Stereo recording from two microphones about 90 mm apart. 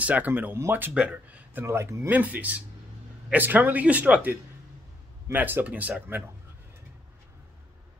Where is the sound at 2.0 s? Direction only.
20° right (ahead or behind).